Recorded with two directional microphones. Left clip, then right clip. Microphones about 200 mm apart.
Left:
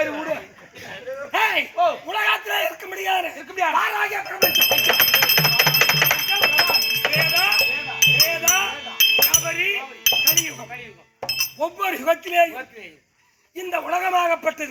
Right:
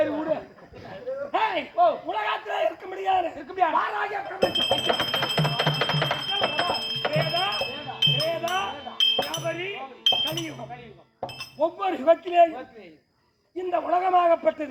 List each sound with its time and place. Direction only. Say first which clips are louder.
0.0 s a sound: left 1 dB; 10° left (ahead or behind)
3.3 s a man's voice: left 2 dB; 5° left (ahead or behind)
4.2 s music: left 6 dB; 10° left (ahead or behind)
9.3 s chink: left 9 dB; 10° left (ahead or behind)
10.3 s chink: left 9 dB; 5° left (ahead or behind)
11.6 s a man's voice: right 2 dB; 5° left (ahead or behind)